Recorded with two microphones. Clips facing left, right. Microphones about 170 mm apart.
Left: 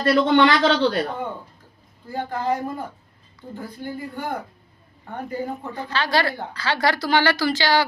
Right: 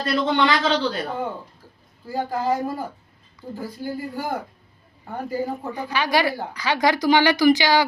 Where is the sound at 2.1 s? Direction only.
5° right (ahead or behind).